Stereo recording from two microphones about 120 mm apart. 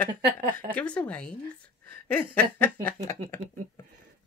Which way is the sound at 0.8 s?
10° left (ahead or behind).